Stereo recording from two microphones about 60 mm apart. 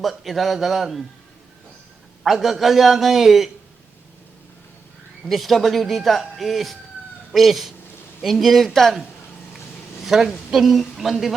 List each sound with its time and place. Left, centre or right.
0.0 s speech: centre
2.2 s speech: centre
5.2 s speech: centre
10.1 s speech: centre